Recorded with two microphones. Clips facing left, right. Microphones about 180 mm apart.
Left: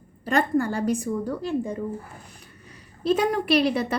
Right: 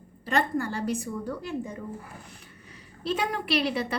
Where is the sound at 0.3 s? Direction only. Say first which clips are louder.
Left 4 dB; 50° left (ahead or behind).